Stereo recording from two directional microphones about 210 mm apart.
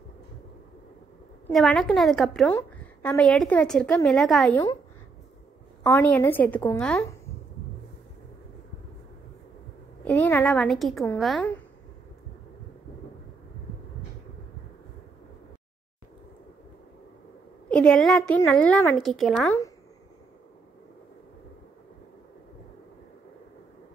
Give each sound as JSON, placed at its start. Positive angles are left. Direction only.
{"t": 1.5, "sound": "a woman's voice", "side_deg": 0}
{"t": 5.9, "sound": "a woman's voice", "side_deg": 10}
{"t": 10.0, "sound": "a woman's voice", "side_deg": 5}
{"t": 17.6, "sound": "a woman's voice", "side_deg": 5}